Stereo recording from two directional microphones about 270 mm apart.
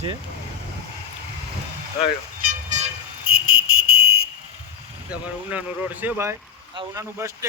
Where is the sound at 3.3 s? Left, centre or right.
Right.